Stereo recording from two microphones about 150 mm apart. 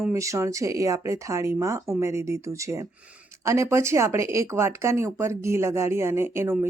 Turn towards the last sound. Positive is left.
turn(degrees=-15)  # may be behind; listen again after turning